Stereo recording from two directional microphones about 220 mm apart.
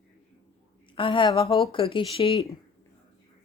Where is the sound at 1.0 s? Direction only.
25° left (ahead or behind).